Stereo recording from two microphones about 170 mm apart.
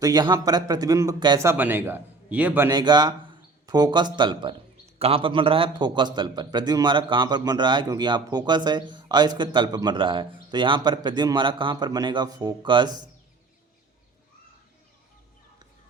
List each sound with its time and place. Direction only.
0.0 s a man's voice: 25° right (ahead or behind)
2.6 s a man's voice: 25° right (ahead or behind)